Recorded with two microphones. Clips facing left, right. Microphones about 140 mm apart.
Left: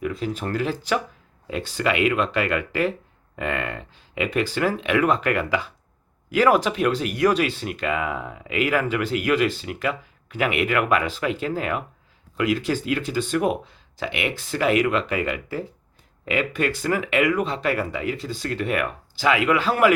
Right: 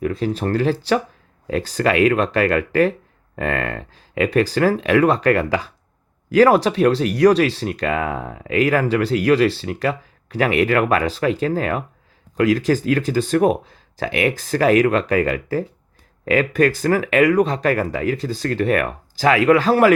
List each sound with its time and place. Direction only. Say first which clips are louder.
0.0 s speech: right 5 dB; 40° right (ahead or behind)